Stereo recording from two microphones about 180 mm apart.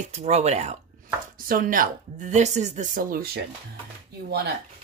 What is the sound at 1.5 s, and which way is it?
Speech, 50° right (ahead or behind).